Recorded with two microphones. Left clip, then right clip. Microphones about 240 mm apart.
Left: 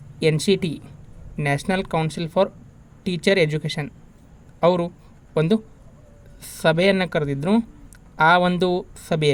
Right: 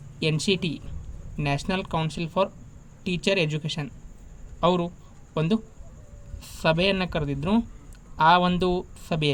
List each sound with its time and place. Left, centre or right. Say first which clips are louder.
0.2 s speech: left 5 dB; centre